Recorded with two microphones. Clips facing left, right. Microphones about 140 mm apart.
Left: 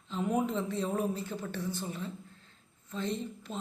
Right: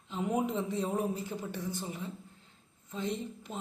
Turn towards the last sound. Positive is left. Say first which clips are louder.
# left 1 dB
turn(degrees=-15)  # may be behind; listen again after turning